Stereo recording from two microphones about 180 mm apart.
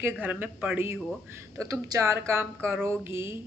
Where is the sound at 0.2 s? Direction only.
10° right (ahead or behind).